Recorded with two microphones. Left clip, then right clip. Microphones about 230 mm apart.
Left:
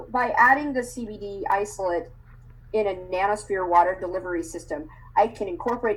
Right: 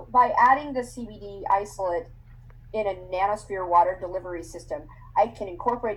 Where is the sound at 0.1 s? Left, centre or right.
Left.